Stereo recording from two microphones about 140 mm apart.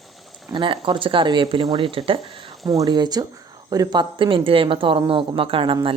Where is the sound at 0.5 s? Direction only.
35° right (ahead or behind).